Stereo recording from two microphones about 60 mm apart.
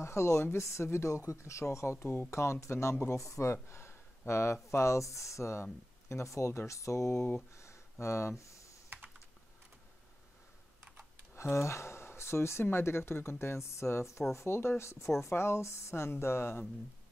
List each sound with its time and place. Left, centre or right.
0.0 s speech: left
3.6 s speech: left
7.5 s a sound: left
11.3 s speech: left